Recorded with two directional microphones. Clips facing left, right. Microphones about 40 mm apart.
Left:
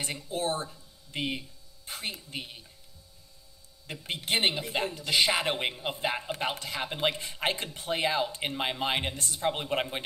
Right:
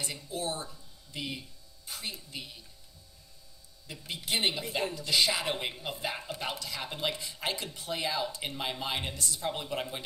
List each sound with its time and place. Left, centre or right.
0.3 s speech: left
4.0 s speech: left
7.2 s speech: left